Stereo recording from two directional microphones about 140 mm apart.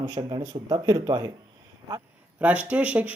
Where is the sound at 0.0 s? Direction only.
30° right (ahead or behind).